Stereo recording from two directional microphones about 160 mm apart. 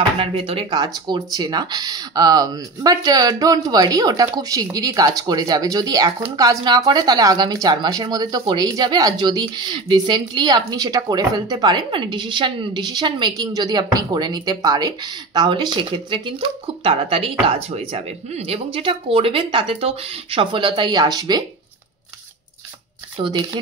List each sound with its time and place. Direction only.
0.2 s speech: 35° right (ahead or behind)
23.1 s speech: 30° right (ahead or behind)